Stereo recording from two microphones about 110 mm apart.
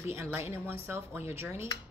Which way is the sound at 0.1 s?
20° right (ahead or behind).